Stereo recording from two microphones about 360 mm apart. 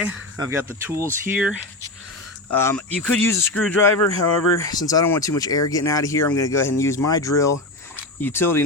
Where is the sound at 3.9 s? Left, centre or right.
Left.